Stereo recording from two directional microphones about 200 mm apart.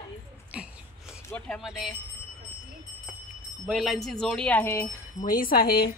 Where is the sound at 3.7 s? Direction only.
Centre (ahead or behind).